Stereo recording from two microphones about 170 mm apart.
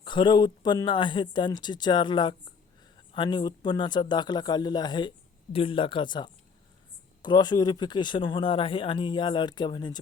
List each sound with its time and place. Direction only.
0.0 s speech: 25° left (ahead or behind)